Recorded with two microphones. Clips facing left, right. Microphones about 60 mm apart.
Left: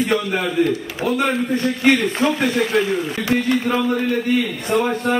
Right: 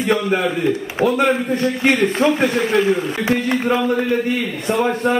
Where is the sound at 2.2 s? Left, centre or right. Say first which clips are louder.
Right 1 dB; right.